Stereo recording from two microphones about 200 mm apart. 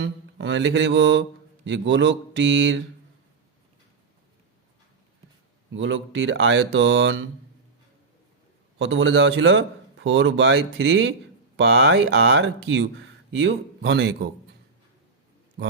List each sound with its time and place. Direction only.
0.0 s mantra: 65° right (ahead or behind)
1.6 s speech: 65° right (ahead or behind)
5.7 s a man's voice: 70° right (ahead or behind)
8.8 s a man's voice: 70° right (ahead or behind); by 14.3 s 55° right (ahead or behind)